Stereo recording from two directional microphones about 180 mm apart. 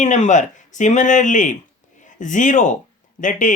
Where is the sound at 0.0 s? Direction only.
40° left (ahead or behind).